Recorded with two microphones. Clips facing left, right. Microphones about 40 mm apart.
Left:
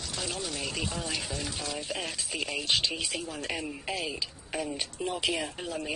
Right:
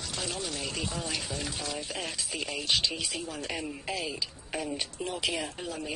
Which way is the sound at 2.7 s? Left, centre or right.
Left.